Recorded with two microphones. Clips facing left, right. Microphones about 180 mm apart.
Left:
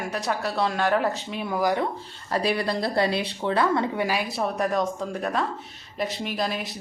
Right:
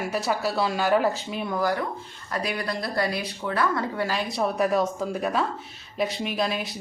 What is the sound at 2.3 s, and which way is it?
Speech, 30° left (ahead or behind).